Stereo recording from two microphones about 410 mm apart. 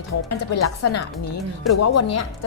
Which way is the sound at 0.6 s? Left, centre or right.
Left.